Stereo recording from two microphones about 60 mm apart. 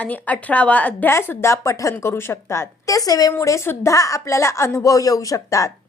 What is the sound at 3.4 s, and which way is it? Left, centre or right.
A woman's voice, left.